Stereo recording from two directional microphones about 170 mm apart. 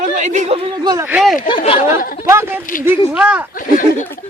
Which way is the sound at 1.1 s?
5° right (ahead or behind).